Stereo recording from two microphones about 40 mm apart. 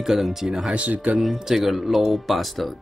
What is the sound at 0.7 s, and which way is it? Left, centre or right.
Speech, right.